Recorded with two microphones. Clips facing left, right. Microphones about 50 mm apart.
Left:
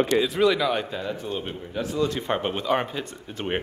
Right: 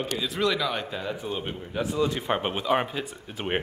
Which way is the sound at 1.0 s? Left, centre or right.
Centre.